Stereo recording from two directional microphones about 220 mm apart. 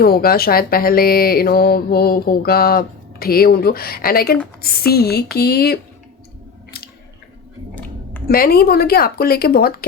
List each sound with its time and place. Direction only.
0.0 s speech: 45° left (ahead or behind)
8.3 s speech: 45° left (ahead or behind)